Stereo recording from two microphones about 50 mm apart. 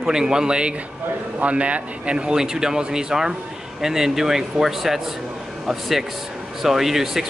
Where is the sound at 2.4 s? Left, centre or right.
Centre.